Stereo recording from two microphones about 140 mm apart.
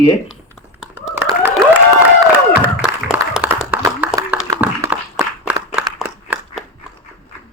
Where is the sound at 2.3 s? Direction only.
10° right (ahead or behind).